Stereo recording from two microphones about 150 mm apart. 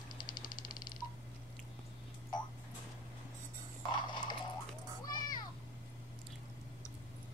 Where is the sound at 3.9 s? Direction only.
30° left (ahead or behind).